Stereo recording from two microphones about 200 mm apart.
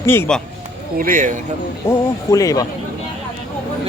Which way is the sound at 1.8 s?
15° left (ahead or behind).